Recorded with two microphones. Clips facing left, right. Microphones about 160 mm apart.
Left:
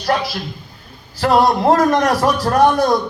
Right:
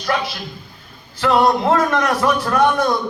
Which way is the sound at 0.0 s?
40° left (ahead or behind).